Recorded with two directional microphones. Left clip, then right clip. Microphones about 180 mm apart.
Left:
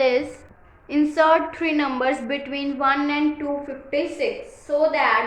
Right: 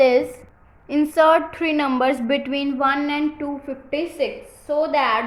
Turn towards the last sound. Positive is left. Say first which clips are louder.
# even
turn(degrees=-55)  # may be behind; listen again after turning